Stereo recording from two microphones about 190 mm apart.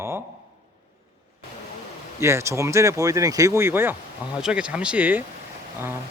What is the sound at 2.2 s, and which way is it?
Speech, 15° right (ahead or behind).